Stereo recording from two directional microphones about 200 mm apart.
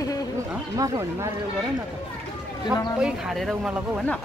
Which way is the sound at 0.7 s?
15° right (ahead or behind).